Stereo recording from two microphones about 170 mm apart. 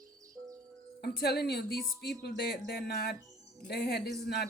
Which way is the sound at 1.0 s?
70° left (ahead or behind).